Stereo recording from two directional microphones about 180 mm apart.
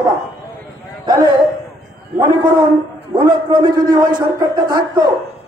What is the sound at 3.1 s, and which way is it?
A man's voice, 25° right (ahead or behind).